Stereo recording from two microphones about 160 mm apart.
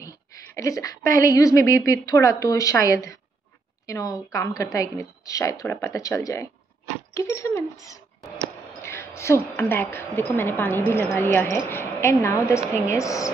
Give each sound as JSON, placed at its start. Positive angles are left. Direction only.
{"t": 0.6, "sound": "a woman's voice", "side_deg": 20}
{"t": 8.8, "sound": "a woman's voice", "side_deg": 15}